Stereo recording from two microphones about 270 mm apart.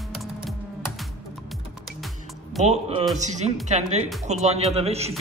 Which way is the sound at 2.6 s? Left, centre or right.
Right.